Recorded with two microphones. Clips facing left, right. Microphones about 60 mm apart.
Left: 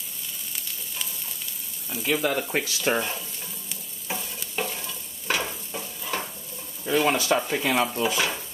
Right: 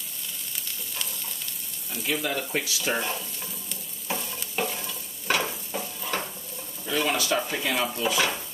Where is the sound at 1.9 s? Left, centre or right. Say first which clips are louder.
Left 3 dB; centre.